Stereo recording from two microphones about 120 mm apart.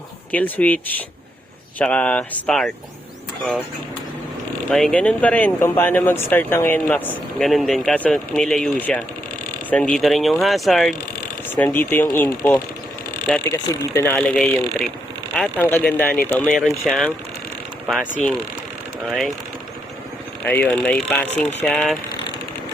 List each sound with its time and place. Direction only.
0.3 s speech: 15° left (ahead or behind)
4.7 s speech: 10° left (ahead or behind)
11.5 s speech: 15° left (ahead or behind)
14.2 s speech: 5° left (ahead or behind)
15.5 s speech: 15° left (ahead or behind)
16.5 s speech: centre (ahead or behind)
20.4 s speech: 15° left (ahead or behind)
21.6 s speech: 5° left (ahead or behind)